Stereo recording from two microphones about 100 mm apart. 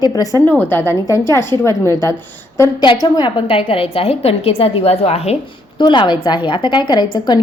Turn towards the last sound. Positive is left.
turn(degrees=45)  # may be behind; listen again after turning